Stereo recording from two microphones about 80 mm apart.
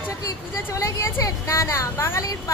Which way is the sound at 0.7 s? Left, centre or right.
Left.